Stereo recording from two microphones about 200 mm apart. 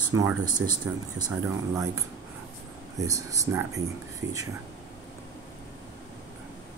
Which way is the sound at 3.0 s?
15° right (ahead or behind).